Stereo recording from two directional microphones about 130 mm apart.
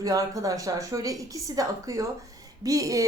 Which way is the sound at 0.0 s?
25° right (ahead or behind).